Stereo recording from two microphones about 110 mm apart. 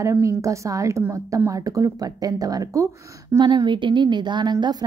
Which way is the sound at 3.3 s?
40° right (ahead or behind).